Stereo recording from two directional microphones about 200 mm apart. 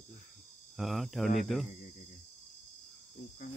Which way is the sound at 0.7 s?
Centre (ahead or behind).